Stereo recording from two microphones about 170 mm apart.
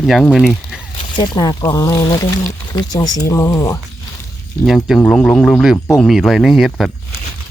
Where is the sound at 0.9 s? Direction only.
30° left (ahead or behind).